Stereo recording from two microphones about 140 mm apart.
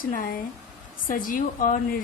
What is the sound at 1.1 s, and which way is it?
Speech, 75° left (ahead or behind).